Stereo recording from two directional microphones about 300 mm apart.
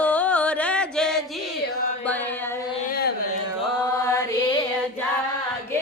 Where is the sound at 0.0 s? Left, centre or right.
Centre.